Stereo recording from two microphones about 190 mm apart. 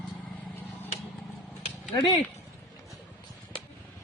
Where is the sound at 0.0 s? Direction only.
5° left (ahead or behind).